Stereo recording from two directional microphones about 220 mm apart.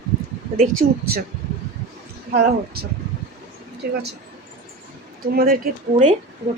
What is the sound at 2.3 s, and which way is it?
Speech, 45° right (ahead or behind).